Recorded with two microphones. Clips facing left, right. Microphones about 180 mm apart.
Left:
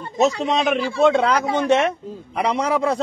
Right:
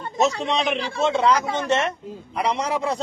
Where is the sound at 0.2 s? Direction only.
45° left (ahead or behind).